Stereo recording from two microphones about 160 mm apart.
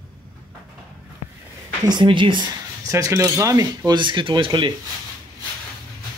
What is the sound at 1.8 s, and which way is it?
Speech, 30° right (ahead or behind).